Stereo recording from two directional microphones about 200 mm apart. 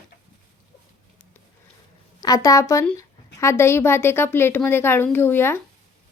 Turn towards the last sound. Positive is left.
turn(degrees=10)  # may be behind; listen again after turning